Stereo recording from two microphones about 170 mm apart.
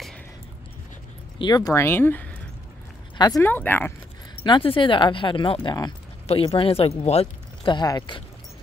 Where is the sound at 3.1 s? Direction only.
25° left (ahead or behind).